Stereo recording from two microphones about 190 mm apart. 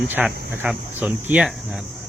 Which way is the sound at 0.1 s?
10° right (ahead or behind).